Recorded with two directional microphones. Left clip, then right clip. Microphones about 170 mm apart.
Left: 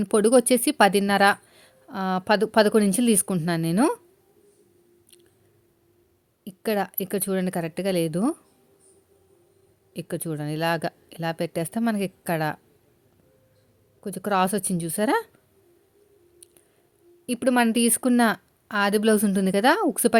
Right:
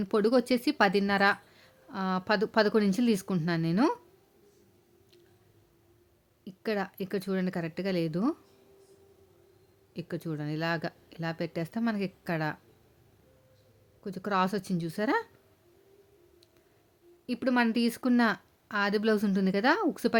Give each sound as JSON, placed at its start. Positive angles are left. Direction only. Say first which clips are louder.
{"t": 0.0, "sound": "speech", "louder": "left 7 dB", "side_deg": 30}
{"t": 6.4, "sound": "speech", "louder": "left 7 dB", "side_deg": 30}
{"t": 9.9, "sound": "speech", "louder": "left 6 dB", "side_deg": 30}
{"t": 14.0, "sound": "speech", "louder": "left 6 dB", "side_deg": 30}
{"t": 17.2, "sound": "speech", "louder": "left 6 dB", "side_deg": 30}